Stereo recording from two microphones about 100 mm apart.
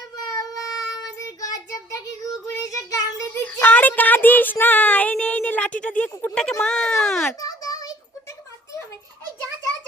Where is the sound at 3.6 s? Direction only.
20° left (ahead or behind).